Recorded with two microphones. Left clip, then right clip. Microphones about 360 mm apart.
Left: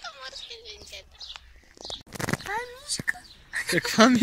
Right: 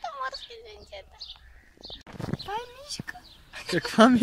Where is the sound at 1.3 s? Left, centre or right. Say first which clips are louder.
Left 4 dB; left.